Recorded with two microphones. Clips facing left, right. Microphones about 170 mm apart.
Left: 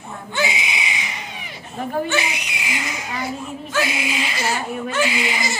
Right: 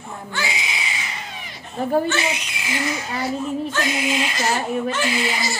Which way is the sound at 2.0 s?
15° left (ahead or behind).